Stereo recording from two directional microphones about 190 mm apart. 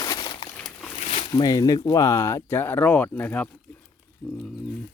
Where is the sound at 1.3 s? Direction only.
20° left (ahead or behind).